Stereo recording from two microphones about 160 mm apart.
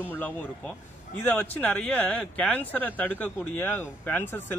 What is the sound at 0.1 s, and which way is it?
Speech, 10° left (ahead or behind).